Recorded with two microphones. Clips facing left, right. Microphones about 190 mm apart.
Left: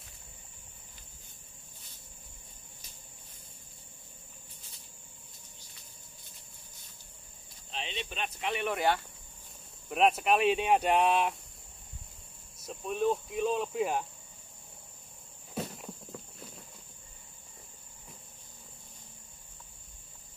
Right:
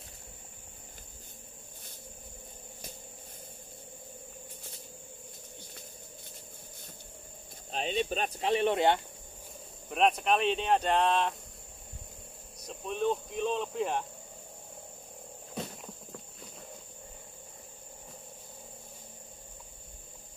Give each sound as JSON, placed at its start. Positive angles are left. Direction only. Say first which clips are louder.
{"t": 7.7, "sound": "speech", "louder": "right 8 dB", "side_deg": -45}
{"t": 9.8, "sound": "speech", "louder": "left 1 dB", "side_deg": 5}
{"t": 12.6, "sound": "speech", "louder": "left 1 dB", "side_deg": 5}
{"t": 15.5, "sound": "clip-clop", "louder": "left 2 dB", "side_deg": 5}